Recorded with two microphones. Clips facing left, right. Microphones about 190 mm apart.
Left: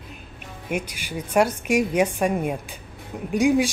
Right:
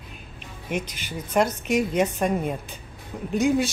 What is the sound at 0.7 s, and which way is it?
Speech, 10° left (ahead or behind).